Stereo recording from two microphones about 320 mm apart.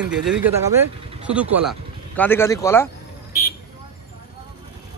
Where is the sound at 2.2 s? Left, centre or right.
Centre.